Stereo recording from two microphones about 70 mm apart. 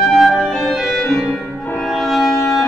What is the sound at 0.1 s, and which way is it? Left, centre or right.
Clarinet, centre.